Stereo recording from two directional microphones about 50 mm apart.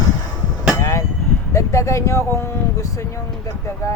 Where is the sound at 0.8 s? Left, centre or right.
Left.